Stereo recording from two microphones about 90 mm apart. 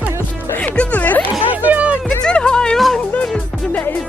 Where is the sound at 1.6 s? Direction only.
20° right (ahead or behind).